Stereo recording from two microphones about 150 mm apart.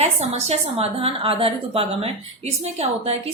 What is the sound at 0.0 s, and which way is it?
A woman's voice, 45° right (ahead or behind).